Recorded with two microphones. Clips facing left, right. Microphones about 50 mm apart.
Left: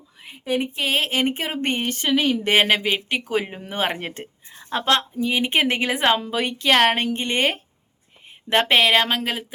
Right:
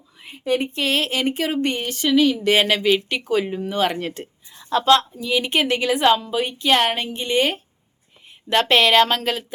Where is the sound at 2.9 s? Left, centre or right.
Centre.